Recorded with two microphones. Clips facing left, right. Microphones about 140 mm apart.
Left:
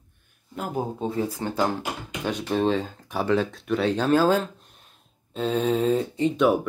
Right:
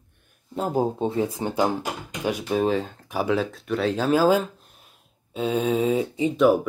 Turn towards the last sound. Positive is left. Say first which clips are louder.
# right 2 dB
turn(degrees=0)  # may be behind; listen again after turning